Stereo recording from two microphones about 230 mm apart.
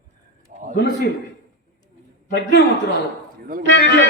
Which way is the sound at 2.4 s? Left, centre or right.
Left.